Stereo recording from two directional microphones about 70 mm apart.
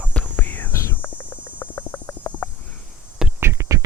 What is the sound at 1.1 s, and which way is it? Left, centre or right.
Hum, left.